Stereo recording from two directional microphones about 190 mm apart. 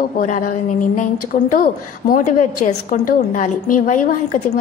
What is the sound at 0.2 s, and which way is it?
A woman's voice, 40° left (ahead or behind).